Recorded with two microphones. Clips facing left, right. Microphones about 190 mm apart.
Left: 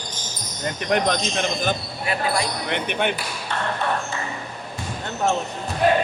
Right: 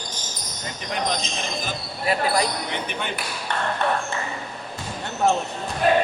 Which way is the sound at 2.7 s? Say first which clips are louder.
Left 5 dB; 65° left (ahead or behind).